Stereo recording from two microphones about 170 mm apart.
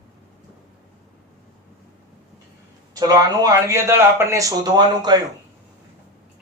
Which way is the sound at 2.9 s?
20° right (ahead or behind).